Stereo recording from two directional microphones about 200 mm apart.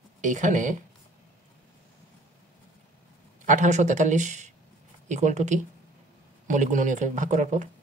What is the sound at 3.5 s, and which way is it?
Speech, 35° right (ahead or behind).